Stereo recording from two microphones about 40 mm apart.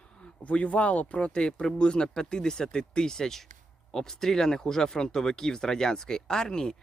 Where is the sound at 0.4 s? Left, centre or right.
Left.